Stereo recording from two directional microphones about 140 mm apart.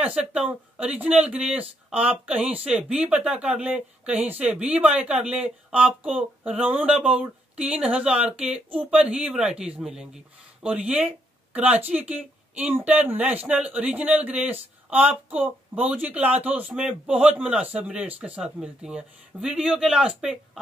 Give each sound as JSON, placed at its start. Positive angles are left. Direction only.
{"t": 0.0, "sound": "speech", "side_deg": -10}